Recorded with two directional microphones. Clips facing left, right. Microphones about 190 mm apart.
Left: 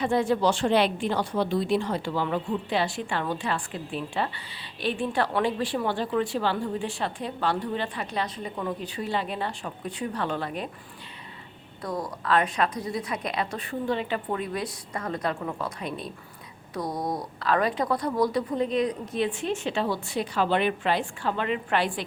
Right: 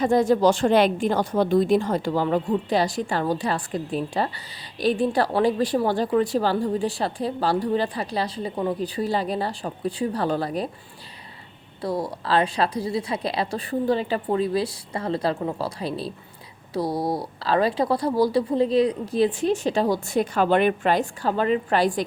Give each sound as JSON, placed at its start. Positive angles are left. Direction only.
{"t": 0.0, "sound": "a woman's voice", "side_deg": -40}
{"t": 11.8, "sound": "a woman's voice", "side_deg": -30}